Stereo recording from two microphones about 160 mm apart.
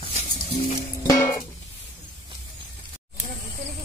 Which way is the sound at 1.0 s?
15° left (ahead or behind).